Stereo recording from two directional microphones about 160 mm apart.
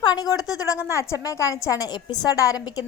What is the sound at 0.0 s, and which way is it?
A woman's voice, 25° left (ahead or behind).